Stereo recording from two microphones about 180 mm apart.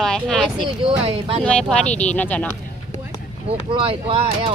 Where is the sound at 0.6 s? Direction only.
30° right (ahead or behind).